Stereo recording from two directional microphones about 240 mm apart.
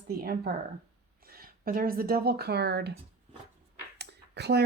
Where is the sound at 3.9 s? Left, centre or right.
Right.